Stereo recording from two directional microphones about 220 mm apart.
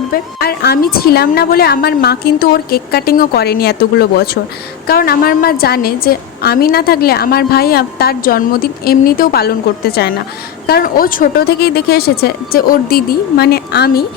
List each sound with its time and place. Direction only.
0.4 s a woman's voice: 45° left (ahead or behind)